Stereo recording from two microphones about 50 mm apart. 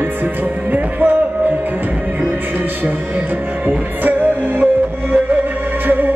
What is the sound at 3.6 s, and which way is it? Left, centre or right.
Music, right.